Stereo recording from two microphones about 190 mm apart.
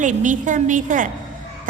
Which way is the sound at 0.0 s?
40° right (ahead or behind).